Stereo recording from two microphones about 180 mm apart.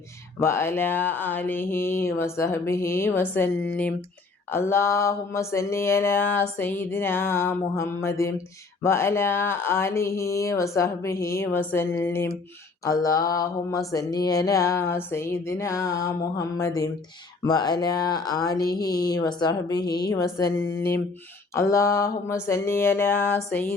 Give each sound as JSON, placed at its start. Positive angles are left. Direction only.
{"t": 0.3, "sound": "speech", "side_deg": 15}
{"t": 12.8, "sound": "mantra", "side_deg": 20}
{"t": 21.5, "sound": "speech", "side_deg": 15}